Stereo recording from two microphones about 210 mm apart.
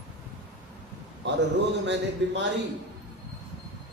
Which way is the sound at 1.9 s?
60° right (ahead or behind).